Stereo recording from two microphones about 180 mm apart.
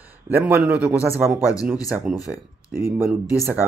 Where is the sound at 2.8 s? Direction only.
15° right (ahead or behind).